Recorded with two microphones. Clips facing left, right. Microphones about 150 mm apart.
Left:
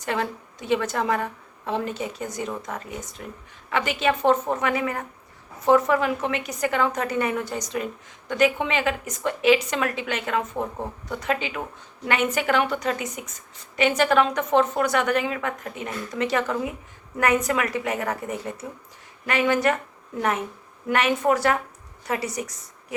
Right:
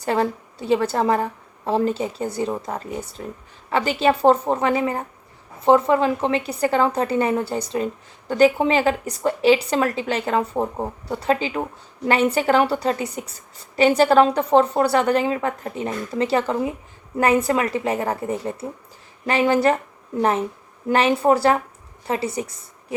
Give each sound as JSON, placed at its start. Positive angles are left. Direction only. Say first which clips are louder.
{"t": 0.0, "sound": "a woman's voice", "louder": "right 6 dB", "side_deg": -35}
{"t": 20.9, "sound": "a woman's voice", "louder": "right 4 dB", "side_deg": -30}